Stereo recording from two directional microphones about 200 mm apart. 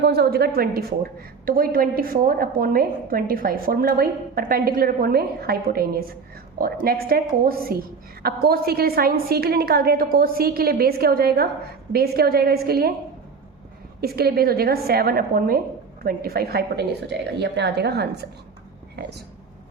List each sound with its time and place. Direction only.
0.0 s a woman's voice: 55° right (ahead or behind)
14.0 s a woman's voice: 50° right (ahead or behind)